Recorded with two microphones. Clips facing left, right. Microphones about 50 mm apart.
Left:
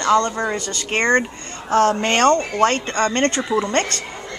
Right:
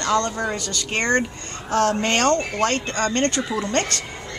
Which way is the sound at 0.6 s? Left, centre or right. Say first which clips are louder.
Left 3 dB; left.